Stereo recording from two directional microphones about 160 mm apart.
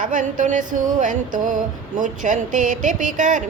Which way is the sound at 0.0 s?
55° right (ahead or behind).